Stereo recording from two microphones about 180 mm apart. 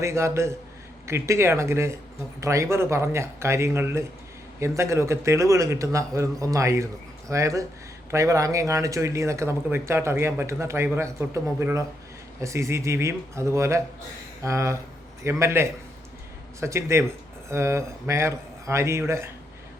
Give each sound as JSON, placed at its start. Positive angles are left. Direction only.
{"t": 0.0, "sound": "speech", "side_deg": -15}